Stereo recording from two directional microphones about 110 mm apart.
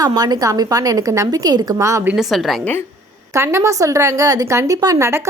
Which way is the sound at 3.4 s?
25° right (ahead or behind).